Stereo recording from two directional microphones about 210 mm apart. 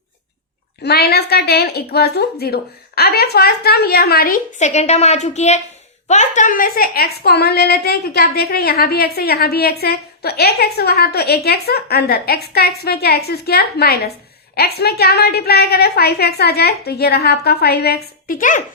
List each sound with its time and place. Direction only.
0.8 s a woman's voice: 50° left (ahead or behind)